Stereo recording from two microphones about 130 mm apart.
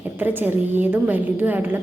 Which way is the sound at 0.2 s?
15° right (ahead or behind).